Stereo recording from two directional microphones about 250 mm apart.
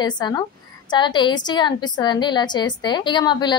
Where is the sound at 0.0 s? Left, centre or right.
Centre.